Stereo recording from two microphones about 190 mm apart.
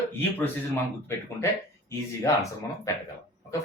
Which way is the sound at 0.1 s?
10° left (ahead or behind).